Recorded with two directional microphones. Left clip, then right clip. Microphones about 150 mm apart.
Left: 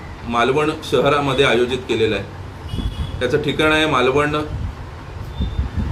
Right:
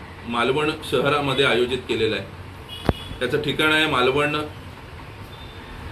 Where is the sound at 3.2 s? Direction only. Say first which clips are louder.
Left 4 dB; 15° left (ahead or behind).